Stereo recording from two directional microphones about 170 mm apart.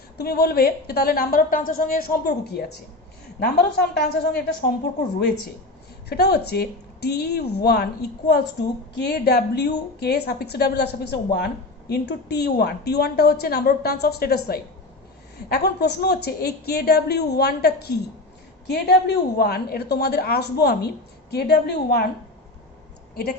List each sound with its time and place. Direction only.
0.2 s a woman's voice: 70° left (ahead or behind)
6.1 s a woman's voice: 75° left (ahead or behind)
23.1 s speech: 70° left (ahead or behind)